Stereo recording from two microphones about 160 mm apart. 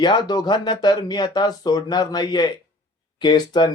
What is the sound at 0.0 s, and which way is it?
Speech, 25° left (ahead or behind).